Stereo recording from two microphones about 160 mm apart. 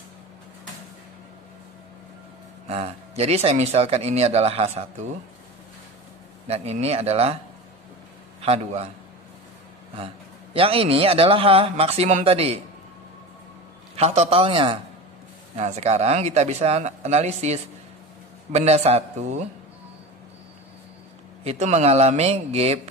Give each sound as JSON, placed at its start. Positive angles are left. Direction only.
{"t": 2.7, "sound": "speech", "side_deg": -40}
{"t": 6.4, "sound": "speech", "side_deg": -40}
{"t": 8.4, "sound": "a man's voice", "side_deg": -40}
{"t": 10.5, "sound": "speech", "side_deg": -35}
{"t": 13.9, "sound": "speech", "side_deg": -40}
{"t": 21.5, "sound": "speech", "side_deg": -45}